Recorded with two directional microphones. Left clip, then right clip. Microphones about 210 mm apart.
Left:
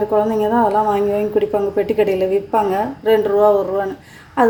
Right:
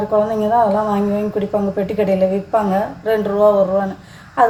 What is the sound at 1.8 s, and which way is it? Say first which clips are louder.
A woman's voice: even; 30° left (ahead or behind).